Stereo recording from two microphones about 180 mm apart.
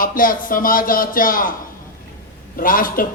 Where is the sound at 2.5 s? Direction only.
50° left (ahead or behind).